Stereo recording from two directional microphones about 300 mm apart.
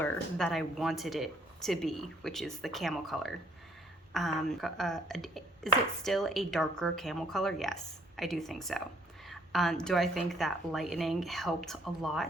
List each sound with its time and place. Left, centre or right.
0.0 s speech: centre